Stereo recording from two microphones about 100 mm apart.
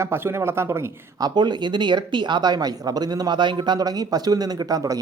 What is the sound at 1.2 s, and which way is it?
Speech, 50° right (ahead or behind).